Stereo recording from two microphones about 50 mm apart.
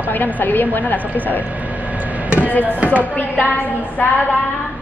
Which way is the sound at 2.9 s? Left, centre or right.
Left.